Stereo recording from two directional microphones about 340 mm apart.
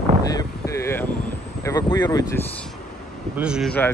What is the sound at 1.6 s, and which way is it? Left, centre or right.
Speech, centre.